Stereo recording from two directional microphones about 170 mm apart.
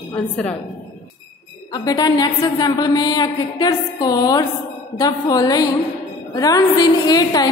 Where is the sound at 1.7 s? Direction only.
20° left (ahead or behind).